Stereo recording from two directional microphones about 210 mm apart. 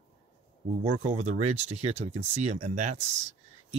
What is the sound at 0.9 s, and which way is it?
Speech, 35° right (ahead or behind).